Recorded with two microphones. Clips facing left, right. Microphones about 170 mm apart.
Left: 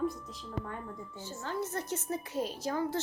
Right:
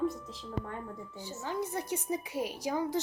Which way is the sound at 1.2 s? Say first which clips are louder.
Right 1 dB; 15° right (ahead or behind).